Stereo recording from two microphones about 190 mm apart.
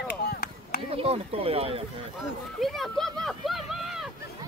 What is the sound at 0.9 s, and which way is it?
Speech, 30° right (ahead or behind).